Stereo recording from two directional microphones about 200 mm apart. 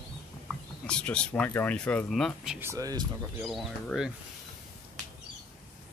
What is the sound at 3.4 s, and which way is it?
Speech, centre (ahead or behind).